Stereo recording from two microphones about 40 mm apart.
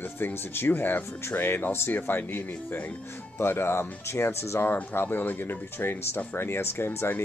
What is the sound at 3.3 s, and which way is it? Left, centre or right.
Speech, left.